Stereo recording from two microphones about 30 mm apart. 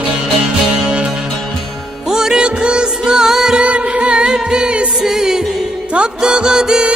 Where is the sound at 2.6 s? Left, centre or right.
Right.